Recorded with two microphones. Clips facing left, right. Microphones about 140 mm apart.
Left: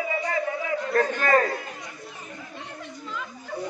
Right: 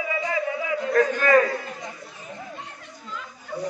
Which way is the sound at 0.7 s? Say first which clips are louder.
Right 4 dB; 35° left (ahead or behind).